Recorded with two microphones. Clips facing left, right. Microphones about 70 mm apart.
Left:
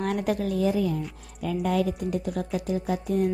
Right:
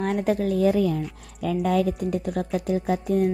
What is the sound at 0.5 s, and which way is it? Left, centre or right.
A woman's voice, right.